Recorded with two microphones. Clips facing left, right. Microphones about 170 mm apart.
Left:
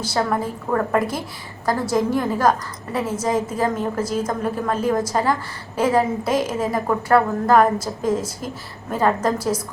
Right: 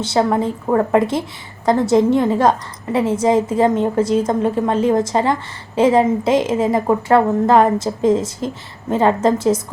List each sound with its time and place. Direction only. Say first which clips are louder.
0.0 s a woman's voice: right 5 dB; 25° right (ahead or behind)